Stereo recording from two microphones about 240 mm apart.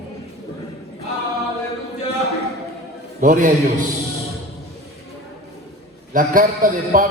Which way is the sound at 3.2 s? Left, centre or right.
Right.